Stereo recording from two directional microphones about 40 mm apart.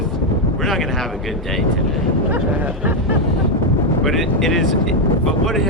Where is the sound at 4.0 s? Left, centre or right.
Centre.